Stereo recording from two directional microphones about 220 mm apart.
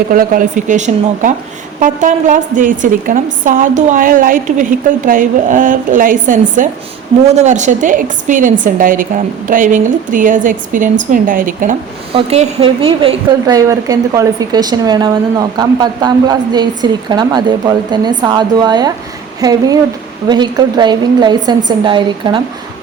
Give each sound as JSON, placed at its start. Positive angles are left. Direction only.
{"t": 0.1, "sound": "a woman's voice", "side_deg": -40}
{"t": 12.1, "sound": "a woman's voice", "side_deg": -25}